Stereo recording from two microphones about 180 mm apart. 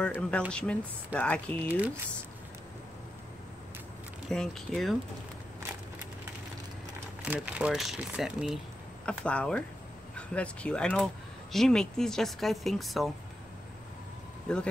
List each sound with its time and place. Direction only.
0.0 s a woman's voice: 5° left (ahead or behind)
4.3 s a woman's voice: 5° left (ahead or behind)
7.2 s a woman's voice: 5° right (ahead or behind)
14.5 s a woman's voice: 5° left (ahead or behind)